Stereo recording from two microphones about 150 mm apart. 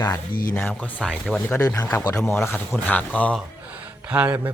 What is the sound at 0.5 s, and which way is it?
Speech, 10° left (ahead or behind).